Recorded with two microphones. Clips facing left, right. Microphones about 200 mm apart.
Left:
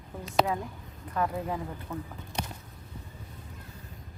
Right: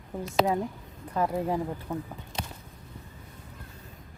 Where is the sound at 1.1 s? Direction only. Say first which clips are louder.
Right 3 dB; 25° right (ahead or behind).